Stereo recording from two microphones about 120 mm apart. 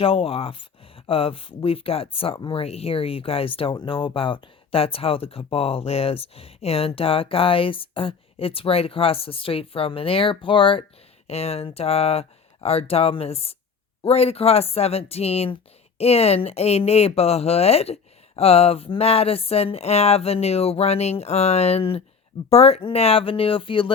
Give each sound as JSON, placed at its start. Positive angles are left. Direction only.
{"t": 0.0, "sound": "speech", "side_deg": 50}
{"t": 11.3, "sound": "speech", "side_deg": 55}